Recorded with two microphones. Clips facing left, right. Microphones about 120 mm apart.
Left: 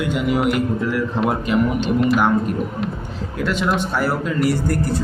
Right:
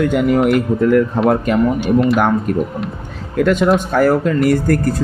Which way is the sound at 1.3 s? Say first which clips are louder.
Right 5 dB; 50° right (ahead or behind).